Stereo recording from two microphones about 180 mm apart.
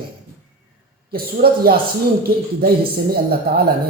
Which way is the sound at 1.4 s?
45° right (ahead or behind).